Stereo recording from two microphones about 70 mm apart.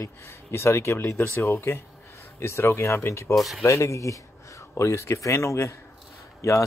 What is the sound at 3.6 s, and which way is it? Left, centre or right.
A man's voice, left.